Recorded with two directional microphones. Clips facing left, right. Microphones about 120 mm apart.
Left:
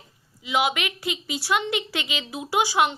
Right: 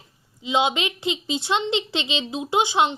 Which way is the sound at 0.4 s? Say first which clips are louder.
Right 2 dB; 25° right (ahead or behind).